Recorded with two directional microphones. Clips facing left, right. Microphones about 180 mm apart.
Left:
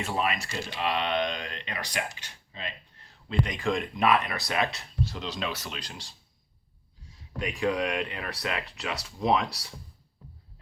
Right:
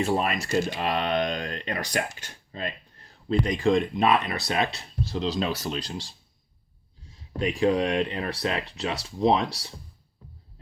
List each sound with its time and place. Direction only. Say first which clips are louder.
0.0 s speech: right 4 dB; 40° right (ahead or behind)
7.3 s speech: right 5 dB; 30° right (ahead or behind)